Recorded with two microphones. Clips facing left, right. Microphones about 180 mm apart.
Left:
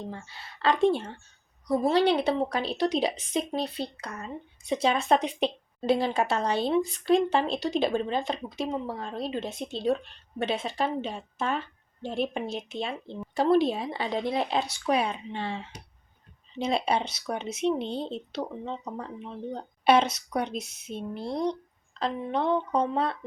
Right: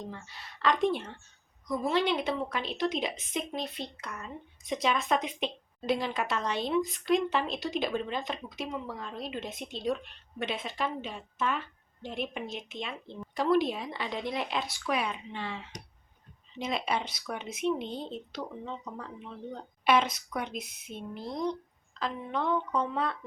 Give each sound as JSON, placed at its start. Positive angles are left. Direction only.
{"t": 0.0, "sound": "a woman's voice", "side_deg": 30}